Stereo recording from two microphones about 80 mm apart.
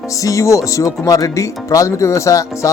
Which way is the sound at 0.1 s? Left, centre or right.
Left.